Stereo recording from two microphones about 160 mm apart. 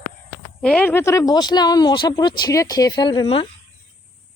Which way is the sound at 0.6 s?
10° left (ahead or behind).